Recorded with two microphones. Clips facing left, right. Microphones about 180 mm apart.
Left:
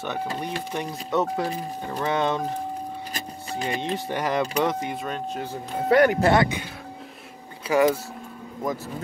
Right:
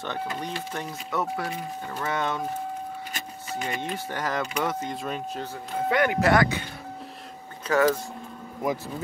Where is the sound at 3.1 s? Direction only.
35° left (ahead or behind).